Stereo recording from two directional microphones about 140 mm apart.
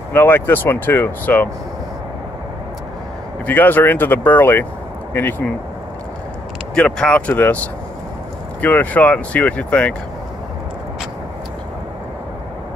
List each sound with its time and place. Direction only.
0.1 s speech: 15° left (ahead or behind)
3.4 s speech: 15° left (ahead or behind)
6.7 s speech: 5° left (ahead or behind)